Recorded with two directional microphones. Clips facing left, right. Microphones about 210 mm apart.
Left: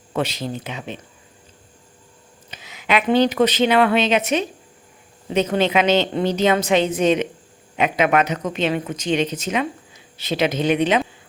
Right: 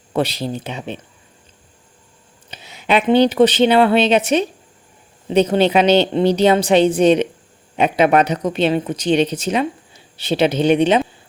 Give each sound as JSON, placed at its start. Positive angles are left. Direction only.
{"t": 0.1, "sound": "speech", "side_deg": -35}
{"t": 2.5, "sound": "speech", "side_deg": -30}